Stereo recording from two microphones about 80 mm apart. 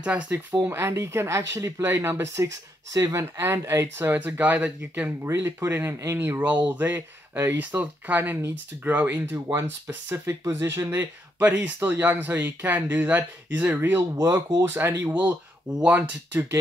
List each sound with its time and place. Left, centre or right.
0.0 s speech: centre
0.6 s speech: right
5.2 s speech: right
11.3 s speech: right
14.1 s speech: right
14.6 s speech: right